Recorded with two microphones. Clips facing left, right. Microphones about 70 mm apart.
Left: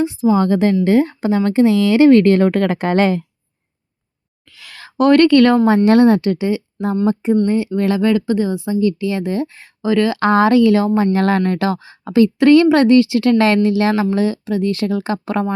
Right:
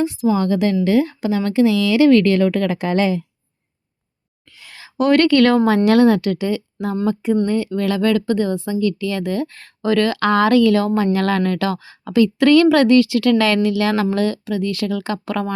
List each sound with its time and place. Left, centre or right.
0.0 s speech: left
4.5 s a sound: left
4.8 s speech: left; by 14.5 s centre
14.5 s speech: left